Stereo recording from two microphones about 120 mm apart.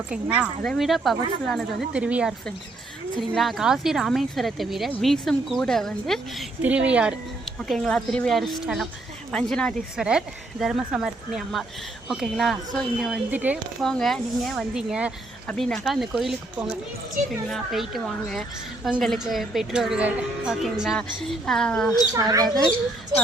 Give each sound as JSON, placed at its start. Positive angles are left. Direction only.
{"t": 0.1, "sound": "a woman's voice", "side_deg": -10}
{"t": 0.6, "sound": "speech", "side_deg": 0}
{"t": 1.9, "sound": "a woman's voice", "side_deg": -10}
{"t": 3.2, "sound": "speech", "side_deg": 0}
{"t": 6.6, "sound": "a woman's voice", "side_deg": -10}
{"t": 7.6, "sound": "speech", "side_deg": 5}
{"t": 10.0, "sound": "speech", "side_deg": -5}
{"t": 13.3, "sound": "a woman's voice", "side_deg": -15}
{"t": 13.8, "sound": "speech", "side_deg": 5}
{"t": 17.5, "sound": "speech", "side_deg": 0}
{"t": 22.1, "sound": "speech", "side_deg": -30}